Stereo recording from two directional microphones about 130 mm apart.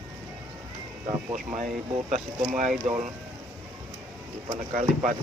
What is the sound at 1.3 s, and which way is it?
Speech, 70° right (ahead or behind).